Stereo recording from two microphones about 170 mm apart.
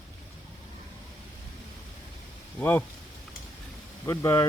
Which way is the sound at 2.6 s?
10° left (ahead or behind).